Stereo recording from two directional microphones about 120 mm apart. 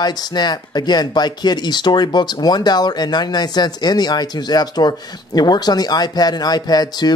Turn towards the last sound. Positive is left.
turn(degrees=35)  # may be behind; listen again after turning